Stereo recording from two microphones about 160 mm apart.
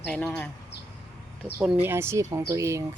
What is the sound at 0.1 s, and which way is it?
Speech, 5° left (ahead or behind).